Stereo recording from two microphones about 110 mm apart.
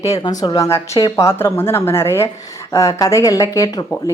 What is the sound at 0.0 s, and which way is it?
A woman's voice, 35° left (ahead or behind).